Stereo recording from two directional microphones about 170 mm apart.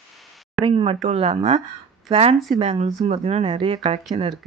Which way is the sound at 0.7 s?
30° right (ahead or behind).